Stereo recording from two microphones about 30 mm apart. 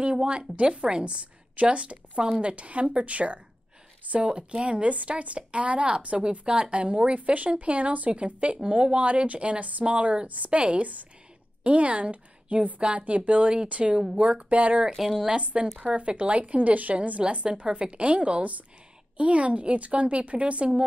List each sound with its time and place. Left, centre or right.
0.0 s a woman's voice: right
4.0 s a sound: right
4.3 s a woman's voice: right
4.8 s a woman's voice: right
7.2 s a woman's voice: right
9.0 s a woman's voice: right
10.2 s a woman's voice: right
10.5 s a woman's voice: right
14.9 s a woman's voice: centre
15.3 s a woman's voice: right
16.3 s a woman's voice: right
17.2 s a woman's voice: right